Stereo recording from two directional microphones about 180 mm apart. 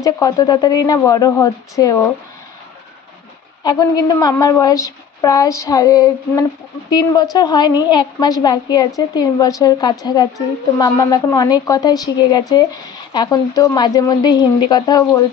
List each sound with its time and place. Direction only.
0.0 s a woman's voice: 20° left (ahead or behind)
3.6 s a woman's voice: 20° left (ahead or behind)